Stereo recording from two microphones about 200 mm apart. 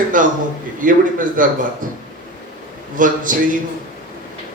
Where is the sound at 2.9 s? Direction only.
40° right (ahead or behind).